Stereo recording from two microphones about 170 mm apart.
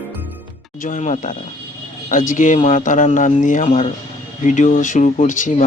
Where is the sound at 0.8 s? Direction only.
45° left (ahead or behind).